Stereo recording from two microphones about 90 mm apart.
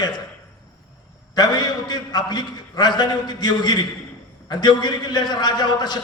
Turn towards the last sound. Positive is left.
turn(degrees=50)  # may be behind; listen again after turning